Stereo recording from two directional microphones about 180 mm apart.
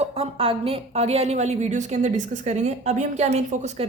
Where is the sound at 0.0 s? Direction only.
35° right (ahead or behind).